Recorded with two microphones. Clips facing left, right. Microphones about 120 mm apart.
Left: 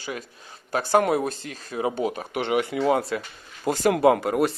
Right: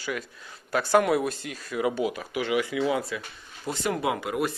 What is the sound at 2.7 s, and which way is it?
Speech, 45° left (ahead or behind).